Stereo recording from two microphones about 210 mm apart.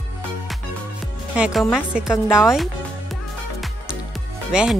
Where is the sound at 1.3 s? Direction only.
5° right (ahead or behind).